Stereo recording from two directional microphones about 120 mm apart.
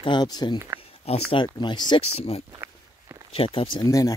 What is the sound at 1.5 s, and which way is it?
Speech, 35° left (ahead or behind).